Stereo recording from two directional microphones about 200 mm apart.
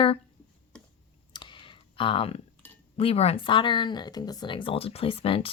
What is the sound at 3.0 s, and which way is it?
Speech, 30° left (ahead or behind).